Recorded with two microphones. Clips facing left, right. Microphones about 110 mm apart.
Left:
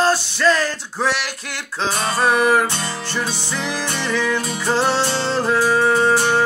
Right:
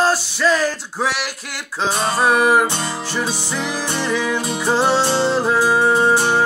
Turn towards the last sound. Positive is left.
turn(degrees=-15)  # may be behind; listen again after turning